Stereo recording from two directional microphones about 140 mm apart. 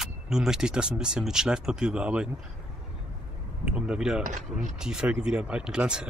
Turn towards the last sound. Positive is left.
turn(degrees=-5)  # may be behind; listen again after turning